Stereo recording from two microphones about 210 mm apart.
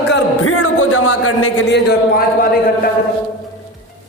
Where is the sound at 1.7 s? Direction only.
45° left (ahead or behind).